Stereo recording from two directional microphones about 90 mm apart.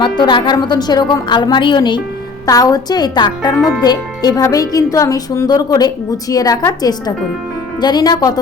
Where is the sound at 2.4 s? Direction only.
40° left (ahead or behind).